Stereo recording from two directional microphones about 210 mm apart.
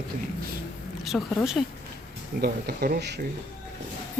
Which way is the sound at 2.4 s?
45° right (ahead or behind).